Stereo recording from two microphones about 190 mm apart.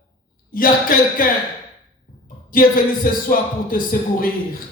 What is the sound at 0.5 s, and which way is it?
Speech, 50° left (ahead or behind).